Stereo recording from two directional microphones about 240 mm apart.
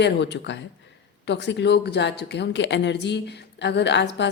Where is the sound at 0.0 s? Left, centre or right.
Left.